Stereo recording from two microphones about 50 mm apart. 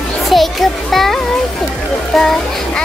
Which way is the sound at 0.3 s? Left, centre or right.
Centre.